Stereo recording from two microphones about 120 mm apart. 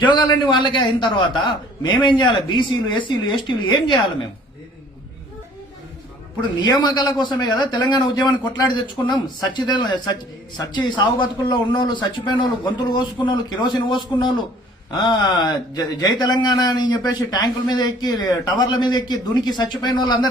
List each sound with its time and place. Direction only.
0.1 s a man's voice: 40° left (ahead or behind)
6.6 s a man's voice: 35° left (ahead or behind)